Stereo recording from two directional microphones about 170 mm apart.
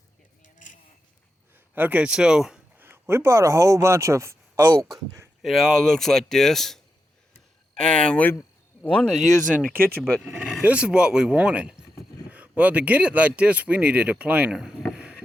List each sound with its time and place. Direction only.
1.5 s speech: 10° right (ahead or behind)
5.4 s speech: centre (ahead or behind)
9.7 s speech: 10° right (ahead or behind)
10.0 s speech: 5° left (ahead or behind)
10.2 s speech: 10° right (ahead or behind)